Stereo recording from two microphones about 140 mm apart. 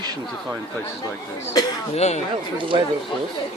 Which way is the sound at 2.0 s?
55° left (ahead or behind).